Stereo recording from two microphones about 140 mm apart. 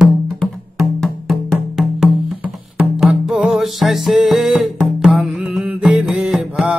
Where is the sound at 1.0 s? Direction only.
Centre (ahead or behind).